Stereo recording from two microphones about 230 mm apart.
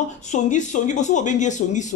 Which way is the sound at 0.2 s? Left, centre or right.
Left.